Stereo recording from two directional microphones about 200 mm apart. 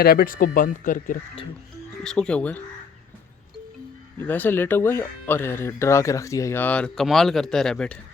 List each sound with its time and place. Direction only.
0.0 s speech: 50° left (ahead or behind)
2.0 s speech: 5° left (ahead or behind)
4.2 s speech: 10° left (ahead or behind)